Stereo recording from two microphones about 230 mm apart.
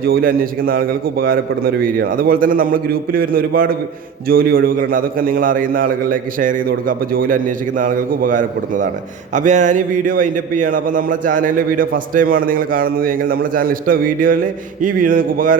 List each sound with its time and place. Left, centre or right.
0.0 s a man's voice: right